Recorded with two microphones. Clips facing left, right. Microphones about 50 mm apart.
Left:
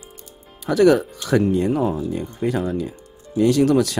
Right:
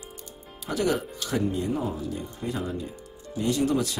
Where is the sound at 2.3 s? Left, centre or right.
Left.